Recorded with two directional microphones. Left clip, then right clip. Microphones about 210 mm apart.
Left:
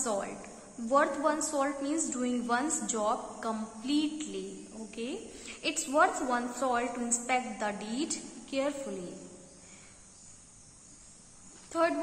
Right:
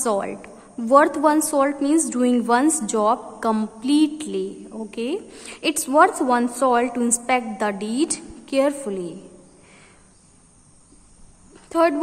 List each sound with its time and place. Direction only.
0.0 s a woman's voice: 45° right (ahead or behind)
11.7 s speech: 45° right (ahead or behind)